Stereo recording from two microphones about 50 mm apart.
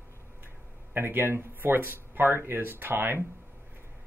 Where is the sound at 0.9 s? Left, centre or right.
Right.